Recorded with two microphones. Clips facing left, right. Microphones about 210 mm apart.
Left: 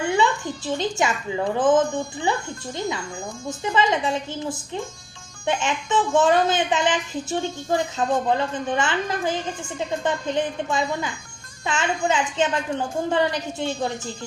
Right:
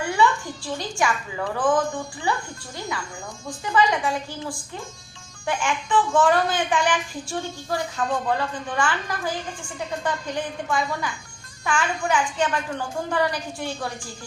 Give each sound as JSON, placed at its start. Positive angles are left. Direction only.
{"t": 0.0, "sound": "a woman's voice", "side_deg": 20}
{"t": 3.6, "sound": "a child's voice", "side_deg": 25}